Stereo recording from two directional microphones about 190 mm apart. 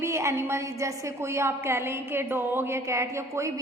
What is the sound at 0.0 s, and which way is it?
A woman's voice, 15° right (ahead or behind).